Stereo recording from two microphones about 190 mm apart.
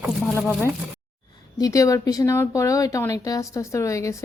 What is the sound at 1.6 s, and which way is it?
Speech, 15° left (ahead or behind).